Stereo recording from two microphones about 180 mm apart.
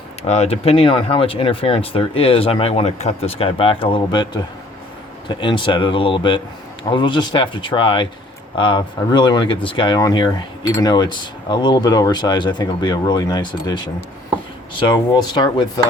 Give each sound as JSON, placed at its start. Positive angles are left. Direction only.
{"t": 0.3, "sound": "speech", "side_deg": 35}